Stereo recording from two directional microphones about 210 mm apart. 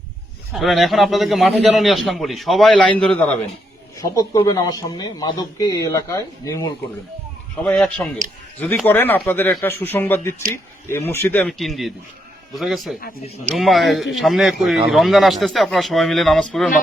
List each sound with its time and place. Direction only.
0.5 s a man's voice: centre (ahead or behind)
4.0 s speech: 15° left (ahead or behind)
7.6 s a man's voice: 5° left (ahead or behind)